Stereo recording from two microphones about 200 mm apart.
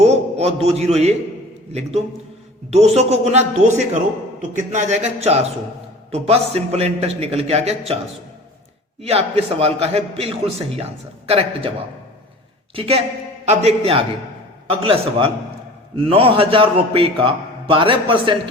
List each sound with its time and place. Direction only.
0.0 s a sound: 35° right (ahead or behind)
2.6 s a man's voice: 35° right (ahead or behind)
9.0 s a man's voice: 30° right (ahead or behind)
12.7 s a man's voice: 25° right (ahead or behind)